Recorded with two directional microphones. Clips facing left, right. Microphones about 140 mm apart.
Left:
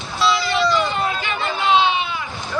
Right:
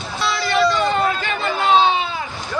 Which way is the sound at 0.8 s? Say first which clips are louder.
Right 3 dB; 45° right (ahead or behind).